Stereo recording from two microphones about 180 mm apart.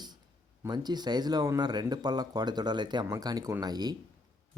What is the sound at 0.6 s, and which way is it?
Speech, 25° right (ahead or behind).